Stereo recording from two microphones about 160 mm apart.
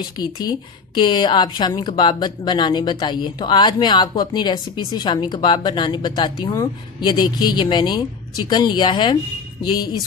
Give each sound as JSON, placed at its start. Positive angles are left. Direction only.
{"t": 0.0, "sound": "a woman's voice", "side_deg": 25}